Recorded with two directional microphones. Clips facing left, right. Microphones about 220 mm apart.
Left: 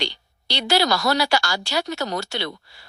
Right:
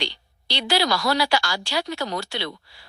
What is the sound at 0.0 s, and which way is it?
Speech, 45° left (ahead or behind).